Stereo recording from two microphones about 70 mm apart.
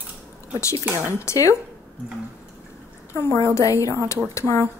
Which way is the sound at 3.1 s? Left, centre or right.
Left.